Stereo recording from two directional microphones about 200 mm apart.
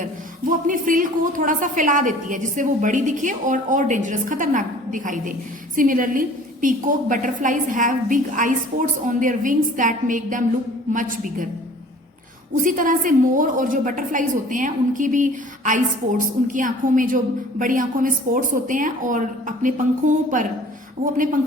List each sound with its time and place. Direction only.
0.7 s a woman's voice: 40° right (ahead or behind)
12.6 s a woman's voice: 40° right (ahead or behind)